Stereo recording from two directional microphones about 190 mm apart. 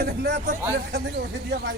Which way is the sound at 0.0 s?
55° right (ahead or behind).